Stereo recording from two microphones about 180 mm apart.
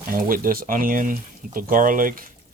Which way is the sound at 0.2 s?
50° right (ahead or behind).